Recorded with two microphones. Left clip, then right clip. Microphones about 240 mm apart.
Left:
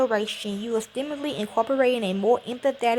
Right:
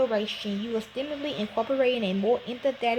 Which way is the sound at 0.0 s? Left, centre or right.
Centre.